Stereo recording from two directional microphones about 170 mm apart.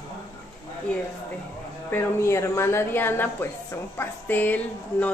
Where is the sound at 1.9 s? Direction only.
15° left (ahead or behind).